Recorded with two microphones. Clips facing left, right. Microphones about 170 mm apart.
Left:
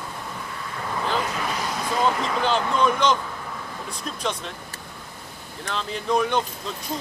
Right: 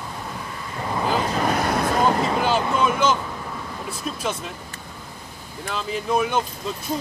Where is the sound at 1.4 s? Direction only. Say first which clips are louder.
Right 7 dB; 55° right (ahead or behind).